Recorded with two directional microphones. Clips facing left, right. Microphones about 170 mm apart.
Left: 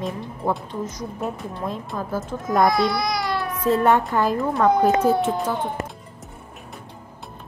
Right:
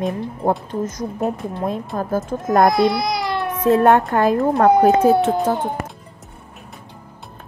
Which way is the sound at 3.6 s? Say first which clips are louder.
Right 5 dB; 55° right (ahead or behind).